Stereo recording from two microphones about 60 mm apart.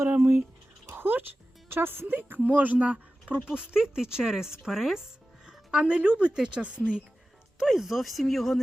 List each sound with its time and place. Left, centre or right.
0.1 s a woman's voice: right
0.9 s dog: right
1.7 s a woman's voice: right; by 7.0 s centre
7.6 s speech: centre